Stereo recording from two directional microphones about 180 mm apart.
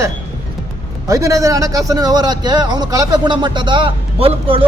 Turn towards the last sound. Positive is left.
turn(degrees=-30)  # may be behind; listen again after turning